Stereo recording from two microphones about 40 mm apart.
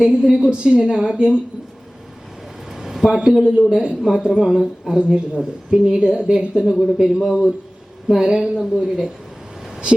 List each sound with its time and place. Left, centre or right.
0.0 s a woman's voice: right
2.7 s a sound: centre
3.1 s a woman's voice: centre
8.2 s a woman's voice: centre
8.6 s speech: centre